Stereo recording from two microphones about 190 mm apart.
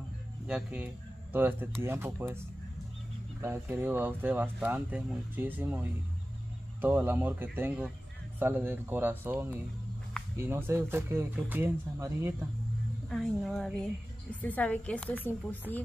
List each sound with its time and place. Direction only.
0.5 s speech: 5° right (ahead or behind)
3.3 s speech: 15° right (ahead or behind)
13.1 s a woman's voice: centre (ahead or behind)